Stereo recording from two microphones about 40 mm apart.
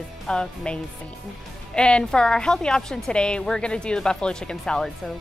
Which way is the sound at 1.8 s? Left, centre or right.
Left.